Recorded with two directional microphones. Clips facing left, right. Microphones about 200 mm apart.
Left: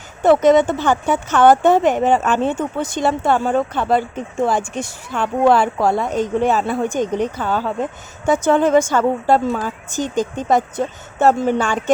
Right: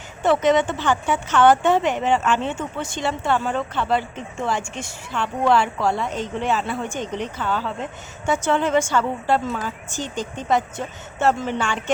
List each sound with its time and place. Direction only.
0.2 s speech: 40° left (ahead or behind)